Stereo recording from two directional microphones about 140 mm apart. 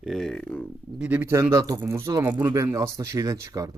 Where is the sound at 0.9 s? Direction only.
10° right (ahead or behind).